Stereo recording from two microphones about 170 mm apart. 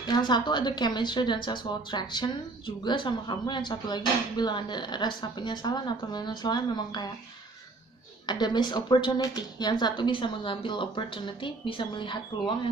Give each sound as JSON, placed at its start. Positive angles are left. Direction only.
{"t": 0.0, "sound": "speech", "side_deg": 25}
{"t": 8.3, "sound": "speech", "side_deg": 25}